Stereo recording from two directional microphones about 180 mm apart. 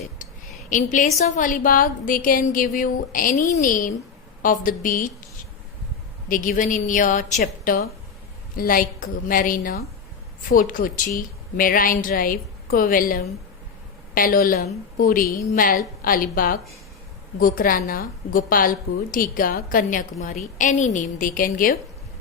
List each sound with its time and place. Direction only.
0.7 s a woman's voice: 45° left (ahead or behind)
6.2 s a woman's voice: 50° left (ahead or behind)